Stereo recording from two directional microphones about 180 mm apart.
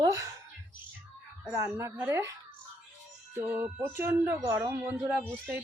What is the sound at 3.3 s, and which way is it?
Speech, 10° right (ahead or behind).